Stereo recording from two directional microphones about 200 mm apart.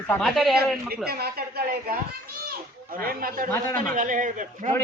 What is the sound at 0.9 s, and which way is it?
A woman's voice, 50° right (ahead or behind).